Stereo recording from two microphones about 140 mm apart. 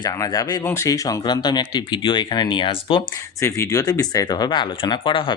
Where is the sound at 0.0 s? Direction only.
25° left (ahead or behind).